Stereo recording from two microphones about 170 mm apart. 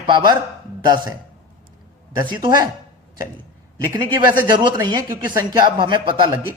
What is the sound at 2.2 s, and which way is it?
Speech, 25° right (ahead or behind).